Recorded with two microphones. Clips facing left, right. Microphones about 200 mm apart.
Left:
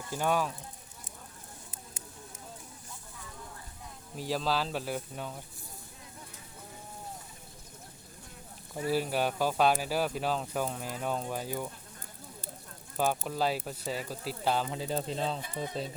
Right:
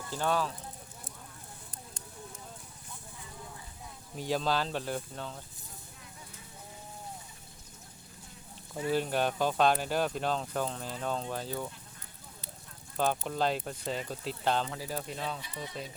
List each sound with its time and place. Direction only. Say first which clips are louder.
0.1 s speech: left 1 dB; 15° left (ahead or behind)
4.1 s speech: right 1 dB; centre (ahead or behind)
8.9 s speech: even; 5° left (ahead or behind)
13.0 s speech: even; 5° left (ahead or behind)
14.7 s speech: left 4 dB; 25° left (ahead or behind)
15.4 s speech: left 5 dB; 50° left (ahead or behind)